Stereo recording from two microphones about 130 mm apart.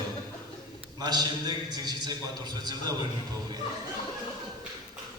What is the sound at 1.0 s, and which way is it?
A man's voice, 30° right (ahead or behind).